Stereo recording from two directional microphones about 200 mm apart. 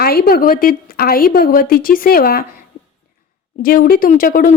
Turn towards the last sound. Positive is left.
turn(degrees=45)  # may be behind; listen again after turning